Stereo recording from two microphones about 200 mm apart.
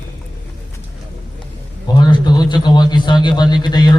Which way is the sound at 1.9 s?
20° left (ahead or behind).